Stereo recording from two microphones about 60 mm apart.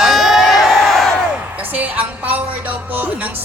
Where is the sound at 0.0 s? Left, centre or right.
Centre.